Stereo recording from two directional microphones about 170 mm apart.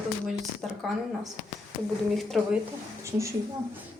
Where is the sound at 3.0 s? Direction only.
15° right (ahead or behind).